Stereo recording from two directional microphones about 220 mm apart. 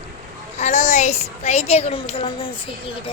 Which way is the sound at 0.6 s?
30° left (ahead or behind).